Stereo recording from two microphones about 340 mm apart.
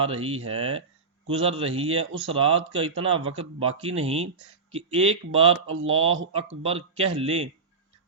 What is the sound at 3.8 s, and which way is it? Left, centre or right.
Speech, centre.